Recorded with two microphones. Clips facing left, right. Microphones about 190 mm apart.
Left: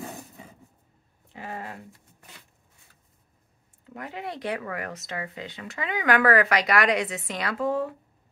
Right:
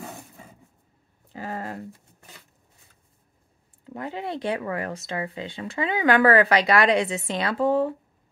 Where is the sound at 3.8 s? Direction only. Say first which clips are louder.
Right 4 dB; 30° right (ahead or behind).